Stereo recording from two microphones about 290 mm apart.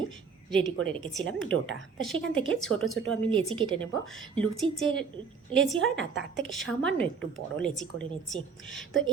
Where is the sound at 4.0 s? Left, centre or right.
Centre.